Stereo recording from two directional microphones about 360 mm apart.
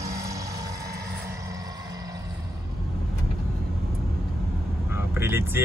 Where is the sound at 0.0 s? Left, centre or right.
Centre.